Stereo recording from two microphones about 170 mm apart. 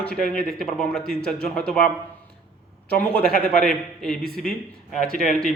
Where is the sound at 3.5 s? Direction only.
5° left (ahead or behind).